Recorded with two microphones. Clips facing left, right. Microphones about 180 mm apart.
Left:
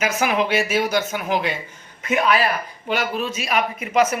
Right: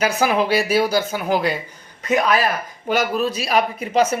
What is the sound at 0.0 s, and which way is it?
Speech, 35° right (ahead or behind).